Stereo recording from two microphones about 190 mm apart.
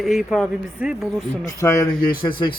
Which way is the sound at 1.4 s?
20° left (ahead or behind).